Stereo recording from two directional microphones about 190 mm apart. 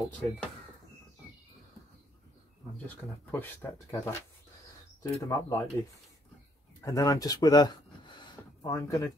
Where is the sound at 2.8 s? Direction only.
10° left (ahead or behind).